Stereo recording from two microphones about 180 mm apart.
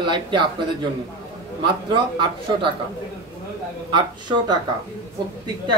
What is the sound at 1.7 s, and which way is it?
A man's voice, 25° right (ahead or behind).